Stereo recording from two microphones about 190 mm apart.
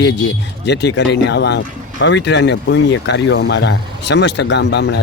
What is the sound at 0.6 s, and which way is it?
Speech, 65° left (ahead or behind).